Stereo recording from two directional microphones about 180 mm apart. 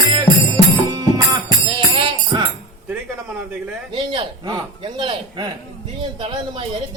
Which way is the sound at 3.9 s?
30° right (ahead or behind).